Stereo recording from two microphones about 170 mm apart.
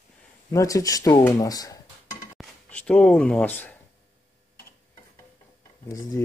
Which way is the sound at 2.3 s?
5° left (ahead or behind).